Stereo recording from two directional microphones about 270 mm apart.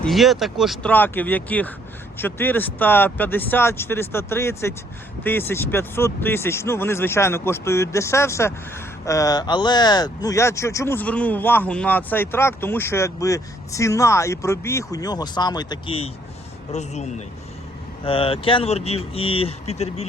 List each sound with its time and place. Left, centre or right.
0.0 s speech: centre; by 20.1 s left